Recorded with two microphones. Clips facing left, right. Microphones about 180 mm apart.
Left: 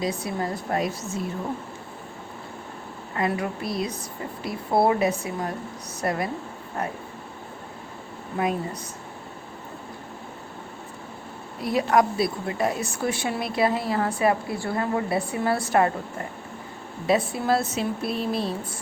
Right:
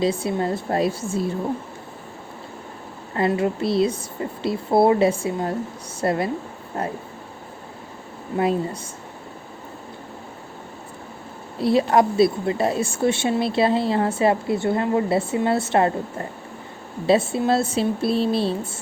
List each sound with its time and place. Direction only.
0.0 s speech: 25° right (ahead or behind)
3.2 s speech: 25° right (ahead or behind)
8.4 s speech: 30° right (ahead or behind)
11.6 s speech: 30° right (ahead or behind)
17.1 s speech: 25° right (ahead or behind)